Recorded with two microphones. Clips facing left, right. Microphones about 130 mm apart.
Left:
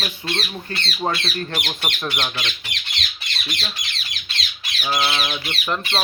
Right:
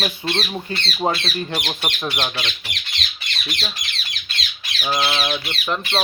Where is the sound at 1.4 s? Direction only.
10° right (ahead or behind).